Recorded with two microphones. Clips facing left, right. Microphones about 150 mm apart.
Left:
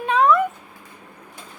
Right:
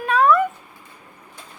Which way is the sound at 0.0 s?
20° left (ahead or behind).